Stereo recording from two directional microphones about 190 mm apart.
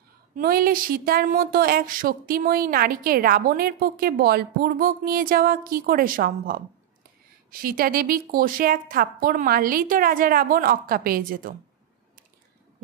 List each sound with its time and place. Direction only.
0.4 s a woman's voice: 50° right (ahead or behind)
7.6 s a woman's voice: 50° right (ahead or behind)